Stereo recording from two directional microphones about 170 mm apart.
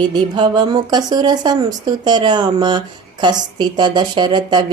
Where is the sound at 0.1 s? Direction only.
25° right (ahead or behind).